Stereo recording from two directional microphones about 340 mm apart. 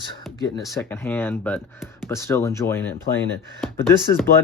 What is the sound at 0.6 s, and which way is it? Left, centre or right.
Speech, centre.